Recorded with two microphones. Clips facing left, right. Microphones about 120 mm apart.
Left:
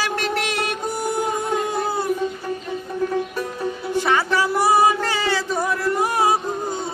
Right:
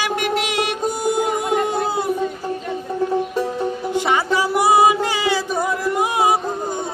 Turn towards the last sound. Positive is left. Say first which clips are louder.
# right 2 dB
turn(degrees=-15)  # may be behind; listen again after turning